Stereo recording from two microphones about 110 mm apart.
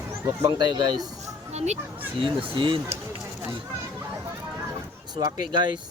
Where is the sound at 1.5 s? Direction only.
80° right.